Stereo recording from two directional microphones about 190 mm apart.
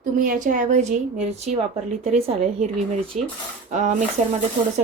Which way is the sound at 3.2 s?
Centre (ahead or behind).